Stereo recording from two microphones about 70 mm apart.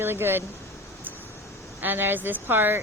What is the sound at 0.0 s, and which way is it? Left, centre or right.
Speech, right.